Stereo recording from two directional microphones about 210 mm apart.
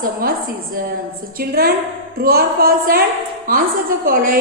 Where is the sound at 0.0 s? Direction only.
45° right (ahead or behind).